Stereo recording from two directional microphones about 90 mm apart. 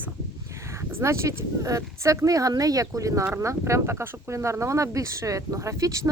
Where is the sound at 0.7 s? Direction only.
30° right (ahead or behind).